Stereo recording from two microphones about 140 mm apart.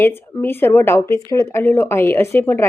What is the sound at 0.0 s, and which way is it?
A woman's voice, 15° left (ahead or behind).